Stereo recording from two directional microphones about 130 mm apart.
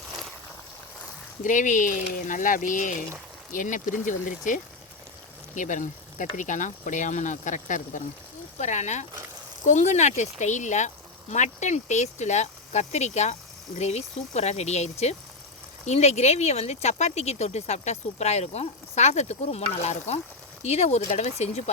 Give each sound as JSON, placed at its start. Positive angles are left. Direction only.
{"t": 1.5, "sound": "speech", "side_deg": 75}
{"t": 8.5, "sound": "speech", "side_deg": 65}